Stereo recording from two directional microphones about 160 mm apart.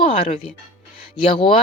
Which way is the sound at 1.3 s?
30° left (ahead or behind).